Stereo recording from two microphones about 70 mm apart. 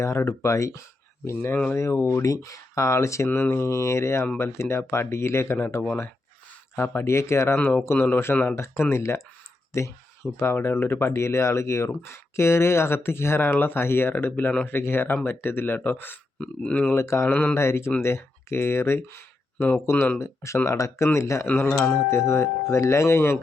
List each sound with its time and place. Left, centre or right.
0.0 s speech: left
3.3 s speech: left
3.7 s speech: left
6.7 s speech: left
16.9 s speech: left
17.2 s speech: left
17.5 s speech: left
21.4 s speech: left
22.1 s speech: left